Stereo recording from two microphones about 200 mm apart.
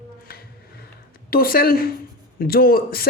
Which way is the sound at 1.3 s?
45° left (ahead or behind).